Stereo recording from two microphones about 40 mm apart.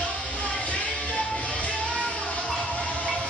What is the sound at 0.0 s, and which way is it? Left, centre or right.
Music, left.